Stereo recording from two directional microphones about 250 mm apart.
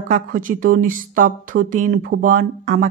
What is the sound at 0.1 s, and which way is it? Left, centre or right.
Speech, right.